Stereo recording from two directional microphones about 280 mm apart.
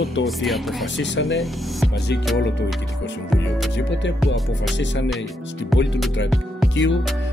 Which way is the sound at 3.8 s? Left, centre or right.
Left.